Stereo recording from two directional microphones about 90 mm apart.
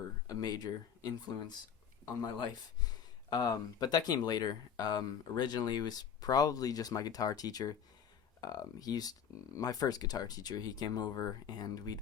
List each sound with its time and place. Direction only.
0.3 s speech: 45° left (ahead or behind)